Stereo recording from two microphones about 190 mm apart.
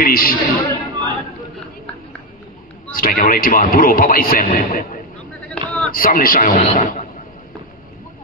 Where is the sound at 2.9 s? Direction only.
45° left (ahead or behind).